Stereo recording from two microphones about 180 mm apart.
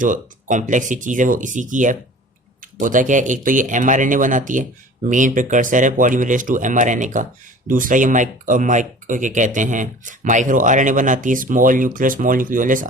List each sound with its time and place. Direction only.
0.0 s speech: 45° right (ahead or behind)